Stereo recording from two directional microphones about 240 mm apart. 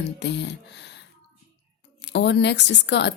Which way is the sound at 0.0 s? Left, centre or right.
Left.